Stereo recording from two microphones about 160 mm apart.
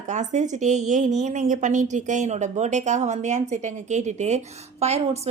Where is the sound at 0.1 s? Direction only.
50° right (ahead or behind).